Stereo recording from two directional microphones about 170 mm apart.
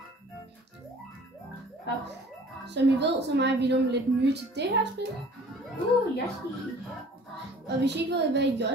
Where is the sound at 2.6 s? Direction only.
90° right.